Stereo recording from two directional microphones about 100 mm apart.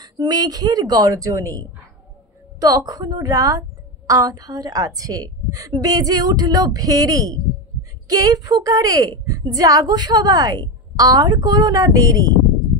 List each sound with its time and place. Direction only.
0.0 s a woman's voice: 40° right (ahead or behind)